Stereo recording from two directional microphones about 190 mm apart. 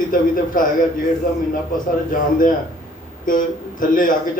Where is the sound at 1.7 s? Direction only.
45° left (ahead or behind).